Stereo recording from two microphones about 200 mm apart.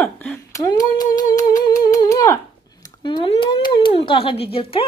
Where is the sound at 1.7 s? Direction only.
15° left (ahead or behind).